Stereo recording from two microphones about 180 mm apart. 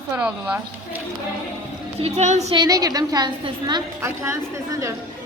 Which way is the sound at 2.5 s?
20° right (ahead or behind).